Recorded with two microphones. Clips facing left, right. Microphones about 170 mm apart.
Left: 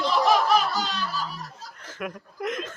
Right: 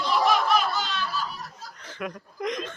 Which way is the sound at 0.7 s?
40° left (ahead or behind).